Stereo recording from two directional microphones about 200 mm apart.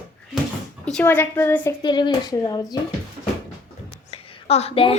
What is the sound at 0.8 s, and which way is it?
Speech, 5° left (ahead or behind).